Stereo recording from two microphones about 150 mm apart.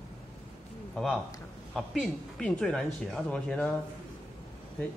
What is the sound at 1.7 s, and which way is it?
Speech, 5° left (ahead or behind).